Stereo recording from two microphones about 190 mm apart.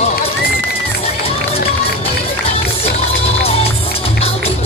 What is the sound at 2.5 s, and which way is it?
Music, 30° left (ahead or behind).